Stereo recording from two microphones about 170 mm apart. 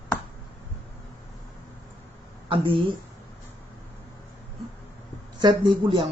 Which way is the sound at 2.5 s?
30° right (ahead or behind).